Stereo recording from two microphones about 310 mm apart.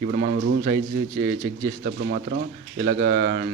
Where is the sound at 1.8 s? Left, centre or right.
Right.